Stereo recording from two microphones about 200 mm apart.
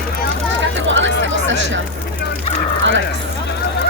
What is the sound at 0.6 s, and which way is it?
Chatter, 70° right (ahead or behind).